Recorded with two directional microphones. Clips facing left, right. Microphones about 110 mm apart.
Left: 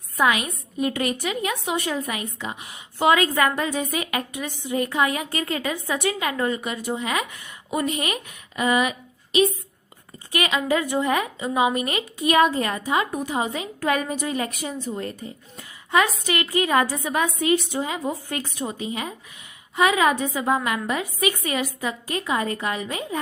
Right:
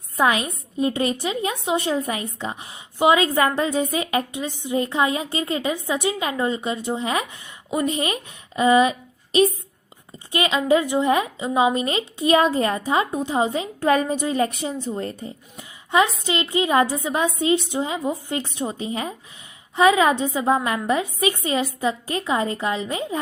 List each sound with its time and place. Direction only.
0.2 s a woman's voice: 30° right (ahead or behind)